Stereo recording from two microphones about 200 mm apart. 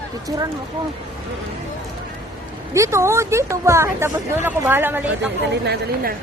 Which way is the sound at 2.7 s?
15° right (ahead or behind).